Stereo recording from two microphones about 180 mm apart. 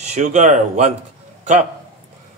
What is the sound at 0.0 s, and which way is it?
Speech, 40° right (ahead or behind).